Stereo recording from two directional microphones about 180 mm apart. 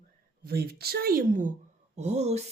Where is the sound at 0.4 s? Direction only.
60° right (ahead or behind).